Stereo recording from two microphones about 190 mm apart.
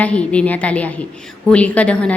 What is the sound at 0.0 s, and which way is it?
A woman's voice, 5° left (ahead or behind).